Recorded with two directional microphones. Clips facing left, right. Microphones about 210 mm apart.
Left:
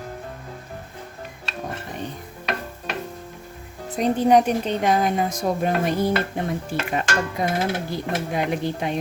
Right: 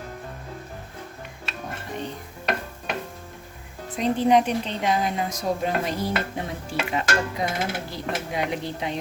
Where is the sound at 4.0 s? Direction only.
45° left (ahead or behind).